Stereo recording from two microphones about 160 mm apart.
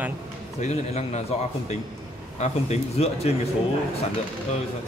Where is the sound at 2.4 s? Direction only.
40° left (ahead or behind).